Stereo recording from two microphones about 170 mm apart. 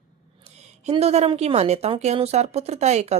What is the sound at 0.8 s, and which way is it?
A woman's voice, 40° right (ahead or behind).